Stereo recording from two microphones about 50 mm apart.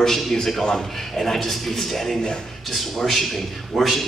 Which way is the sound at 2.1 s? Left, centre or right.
Centre.